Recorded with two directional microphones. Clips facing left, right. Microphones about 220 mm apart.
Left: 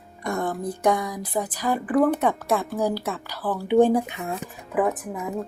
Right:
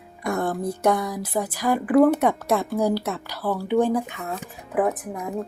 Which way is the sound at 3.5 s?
20° left (ahead or behind).